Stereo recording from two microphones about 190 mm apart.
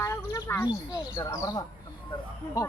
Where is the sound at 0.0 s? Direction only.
15° left (ahead or behind).